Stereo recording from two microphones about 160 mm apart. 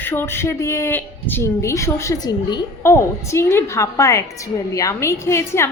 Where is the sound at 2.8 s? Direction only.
15° left (ahead or behind).